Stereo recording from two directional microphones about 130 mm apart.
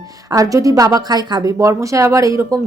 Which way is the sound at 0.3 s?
25° right (ahead or behind).